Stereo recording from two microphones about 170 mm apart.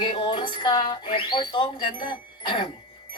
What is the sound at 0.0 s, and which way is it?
Speech, 30° left (ahead or behind).